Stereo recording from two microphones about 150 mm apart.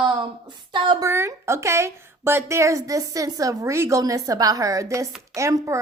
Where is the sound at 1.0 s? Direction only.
20° right (ahead or behind).